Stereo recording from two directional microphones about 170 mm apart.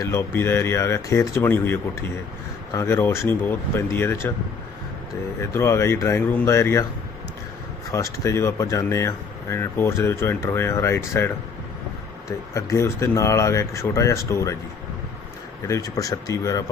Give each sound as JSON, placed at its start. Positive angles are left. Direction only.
{"t": 0.0, "sound": "speech", "side_deg": 15}
{"t": 5.4, "sound": "speech", "side_deg": 15}
{"t": 7.9, "sound": "speech", "side_deg": 15}
{"t": 12.5, "sound": "speech", "side_deg": 15}
{"t": 15.6, "sound": "speech", "side_deg": 20}